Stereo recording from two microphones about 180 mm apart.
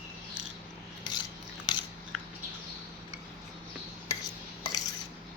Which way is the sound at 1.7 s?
25° left (ahead or behind).